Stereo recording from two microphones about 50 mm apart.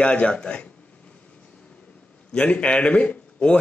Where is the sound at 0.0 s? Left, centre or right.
Left.